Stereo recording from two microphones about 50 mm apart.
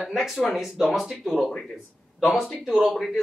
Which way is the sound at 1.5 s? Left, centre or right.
Centre.